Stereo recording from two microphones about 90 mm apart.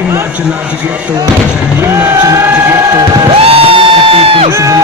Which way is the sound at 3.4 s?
90° right.